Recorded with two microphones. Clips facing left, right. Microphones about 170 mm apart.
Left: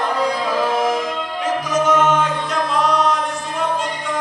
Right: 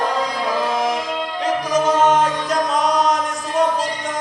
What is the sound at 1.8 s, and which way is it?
Music, 35° right (ahead or behind).